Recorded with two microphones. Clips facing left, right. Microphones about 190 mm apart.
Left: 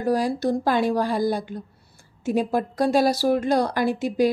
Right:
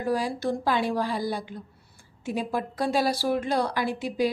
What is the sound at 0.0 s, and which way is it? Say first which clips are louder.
A woman's voice: left 5 dB; 40° left (ahead or behind).